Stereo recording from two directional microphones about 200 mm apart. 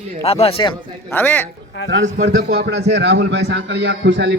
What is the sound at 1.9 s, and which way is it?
A man's voice, 60° right (ahead or behind).